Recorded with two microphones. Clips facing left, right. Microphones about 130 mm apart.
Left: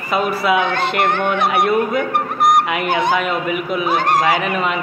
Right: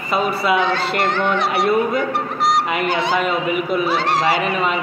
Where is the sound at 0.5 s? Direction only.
55° left (ahead or behind).